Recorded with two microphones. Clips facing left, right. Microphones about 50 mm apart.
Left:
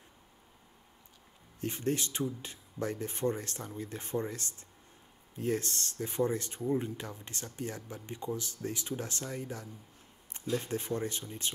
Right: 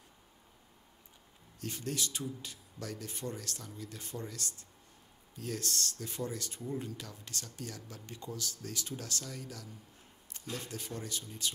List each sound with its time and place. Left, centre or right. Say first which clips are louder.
1.6 s speech: left 5 dB; left